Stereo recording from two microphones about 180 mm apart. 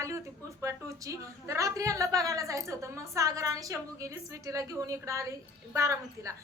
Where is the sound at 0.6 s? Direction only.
15° right (ahead or behind).